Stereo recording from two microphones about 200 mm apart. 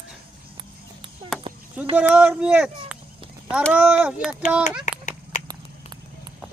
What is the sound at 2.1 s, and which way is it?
Speech, 5° right (ahead or behind).